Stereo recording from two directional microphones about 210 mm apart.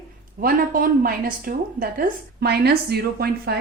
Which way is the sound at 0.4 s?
45° right (ahead or behind).